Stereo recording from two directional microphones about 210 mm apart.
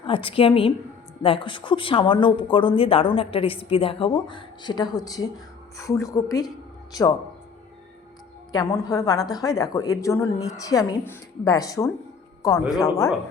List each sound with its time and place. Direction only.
0.0 s a woman's voice: 25° left (ahead or behind)
8.5 s a woman's voice: 15° left (ahead or behind)
12.5 s speech: centre (ahead or behind)